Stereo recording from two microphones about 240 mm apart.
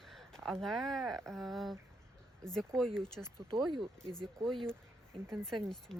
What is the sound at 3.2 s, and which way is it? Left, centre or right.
Speech, centre.